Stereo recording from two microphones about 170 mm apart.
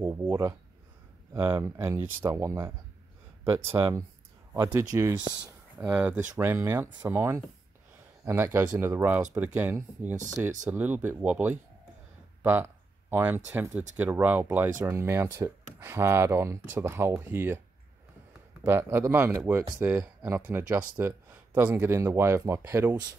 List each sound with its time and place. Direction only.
0.0 s speech: 15° right (ahead or behind)
3.7 s speech: 25° right (ahead or behind)
4.6 s speech: 15° right (ahead or behind)
18.6 s speech: 15° right (ahead or behind)